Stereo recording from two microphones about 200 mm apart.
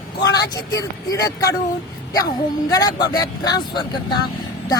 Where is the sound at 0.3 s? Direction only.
20° left (ahead or behind).